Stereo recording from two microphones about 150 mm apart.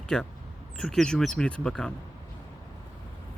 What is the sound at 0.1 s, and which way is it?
Speech, 5° left (ahead or behind).